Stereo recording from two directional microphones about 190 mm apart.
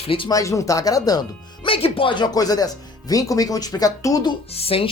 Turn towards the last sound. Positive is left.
turn(degrees=30)  # may be behind; listen again after turning